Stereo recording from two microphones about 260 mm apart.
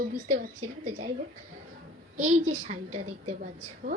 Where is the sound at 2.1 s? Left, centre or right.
Right.